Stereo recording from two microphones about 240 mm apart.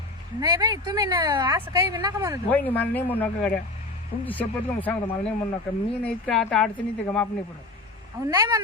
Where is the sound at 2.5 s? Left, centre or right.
Centre.